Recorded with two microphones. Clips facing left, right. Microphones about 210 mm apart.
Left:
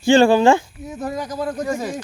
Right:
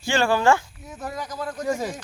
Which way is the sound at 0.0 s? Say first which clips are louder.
Left 8 dB; 20° left (ahead or behind).